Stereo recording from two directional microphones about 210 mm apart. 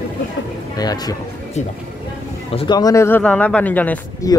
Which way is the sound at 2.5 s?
25° left (ahead or behind).